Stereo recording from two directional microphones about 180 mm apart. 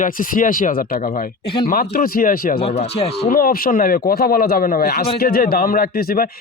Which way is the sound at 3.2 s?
55° left (ahead or behind).